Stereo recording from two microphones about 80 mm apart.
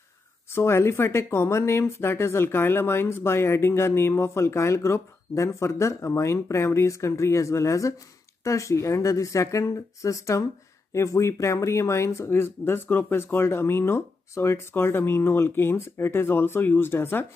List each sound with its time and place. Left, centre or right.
0.5 s speech: left